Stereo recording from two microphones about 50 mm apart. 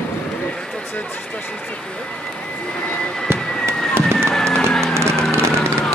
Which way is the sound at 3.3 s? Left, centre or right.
Right.